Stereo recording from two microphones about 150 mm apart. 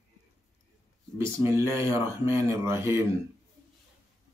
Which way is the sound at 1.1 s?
15° right (ahead or behind).